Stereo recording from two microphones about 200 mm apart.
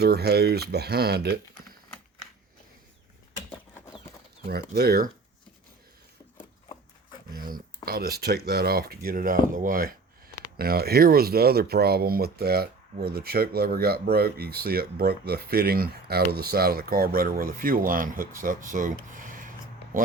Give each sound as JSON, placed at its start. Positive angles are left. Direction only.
{"t": 0.0, "sound": "speech", "side_deg": -55}
{"t": 4.4, "sound": "speech", "side_deg": -50}
{"t": 7.3, "sound": "speech", "side_deg": -45}
{"t": 19.1, "sound": "a sound", "side_deg": -40}